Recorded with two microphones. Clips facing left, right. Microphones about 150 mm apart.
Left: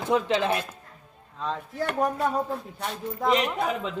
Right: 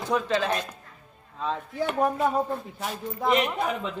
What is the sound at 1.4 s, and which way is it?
Speech, centre (ahead or behind).